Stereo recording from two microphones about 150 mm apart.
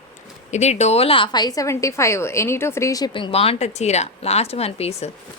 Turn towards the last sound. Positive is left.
turn(degrees=45)  # may be behind; listen again after turning